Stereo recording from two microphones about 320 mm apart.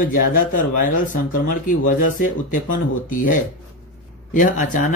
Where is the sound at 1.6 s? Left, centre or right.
Left.